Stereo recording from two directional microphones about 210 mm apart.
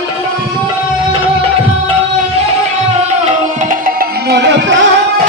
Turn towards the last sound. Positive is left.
turn(degrees=-55)  # may be behind; listen again after turning